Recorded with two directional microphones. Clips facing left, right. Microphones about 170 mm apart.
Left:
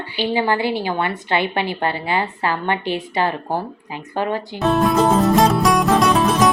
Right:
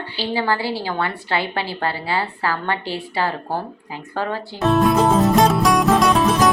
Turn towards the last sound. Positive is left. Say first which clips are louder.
# even
turn(degrees=0)  # may be behind; listen again after turning